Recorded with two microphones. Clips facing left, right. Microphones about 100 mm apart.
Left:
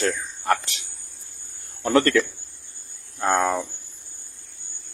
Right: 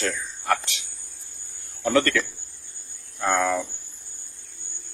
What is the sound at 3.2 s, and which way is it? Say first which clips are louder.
Speech: left 2 dB; 35° left (ahead or behind).